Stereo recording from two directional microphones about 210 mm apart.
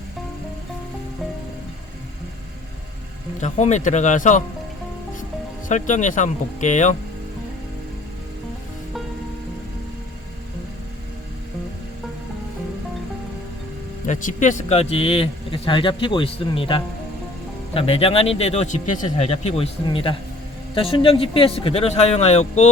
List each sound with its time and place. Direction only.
3.4 s speech: 35° left (ahead or behind)
5.6 s speech: 35° left (ahead or behind)
14.1 s speech: 35° left (ahead or behind)